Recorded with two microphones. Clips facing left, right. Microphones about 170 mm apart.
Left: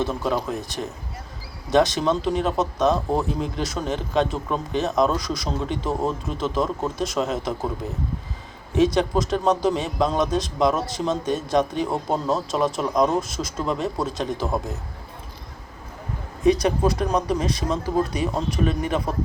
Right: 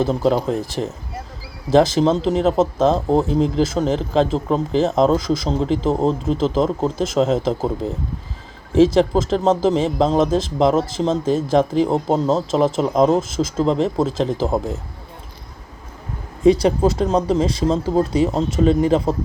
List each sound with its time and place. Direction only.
0.1 s speech: 25° right (ahead or behind)
16.4 s speech: 30° right (ahead or behind)